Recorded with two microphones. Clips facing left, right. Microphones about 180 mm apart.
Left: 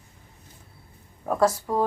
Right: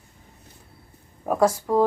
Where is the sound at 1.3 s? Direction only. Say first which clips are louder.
Right 2 dB; 10° right (ahead or behind).